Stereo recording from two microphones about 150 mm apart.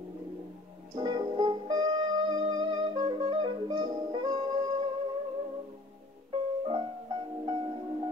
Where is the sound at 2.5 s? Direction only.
30° right (ahead or behind).